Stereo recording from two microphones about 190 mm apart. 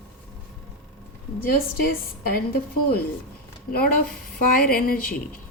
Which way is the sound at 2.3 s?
55° left (ahead or behind).